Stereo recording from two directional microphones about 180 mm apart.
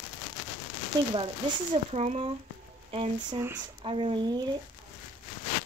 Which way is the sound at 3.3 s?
15° right (ahead or behind).